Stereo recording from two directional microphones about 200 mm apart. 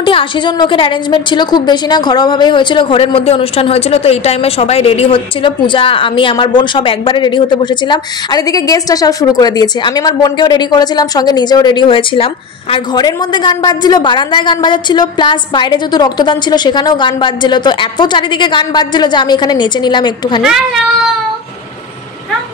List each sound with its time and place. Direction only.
0.0 s a woman's voice: 25° left (ahead or behind)